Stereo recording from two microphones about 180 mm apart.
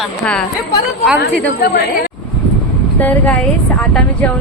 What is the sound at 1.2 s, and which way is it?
Speech, 65° left (ahead or behind).